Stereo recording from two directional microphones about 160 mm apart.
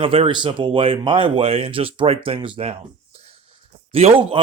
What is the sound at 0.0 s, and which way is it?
A man's voice, 35° right (ahead or behind).